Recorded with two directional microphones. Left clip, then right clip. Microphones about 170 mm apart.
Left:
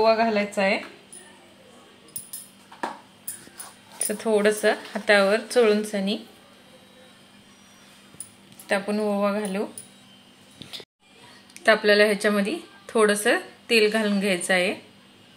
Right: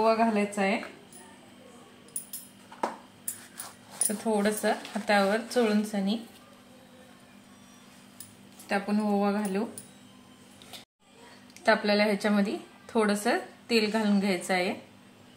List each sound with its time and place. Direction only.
0.0 s speech: 45° left (ahead or behind)
4.1 s speech: 40° left (ahead or behind)
8.6 s speech: 50° left (ahead or behind)
11.5 s speech: 45° left (ahead or behind)